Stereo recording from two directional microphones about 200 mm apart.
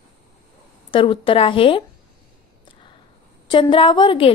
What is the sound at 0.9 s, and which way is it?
Speech, 25° left (ahead or behind).